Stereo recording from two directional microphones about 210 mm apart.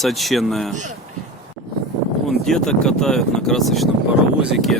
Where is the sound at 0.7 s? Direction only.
35° right (ahead or behind).